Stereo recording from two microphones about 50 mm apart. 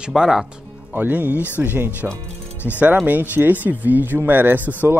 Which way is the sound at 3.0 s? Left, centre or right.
Right.